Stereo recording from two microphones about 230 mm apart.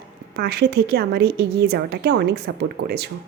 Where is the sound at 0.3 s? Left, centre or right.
Right.